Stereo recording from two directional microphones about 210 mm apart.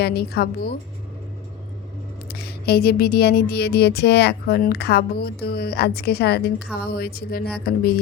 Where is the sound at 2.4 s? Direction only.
50° left (ahead or behind).